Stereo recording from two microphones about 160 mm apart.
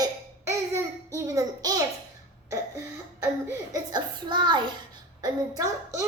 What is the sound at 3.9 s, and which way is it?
A child's voice, 30° right (ahead or behind).